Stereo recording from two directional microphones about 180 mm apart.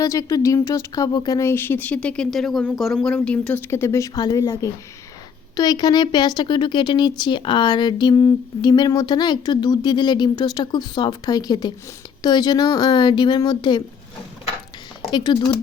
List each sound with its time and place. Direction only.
0.0 s speech: 20° left (ahead or behind)
15.1 s speech: 25° left (ahead or behind)